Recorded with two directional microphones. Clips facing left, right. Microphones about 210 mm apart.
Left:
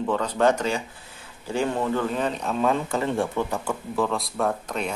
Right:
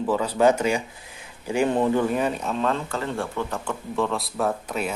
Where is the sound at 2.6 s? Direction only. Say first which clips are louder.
Left 4 dB; 15° left (ahead or behind).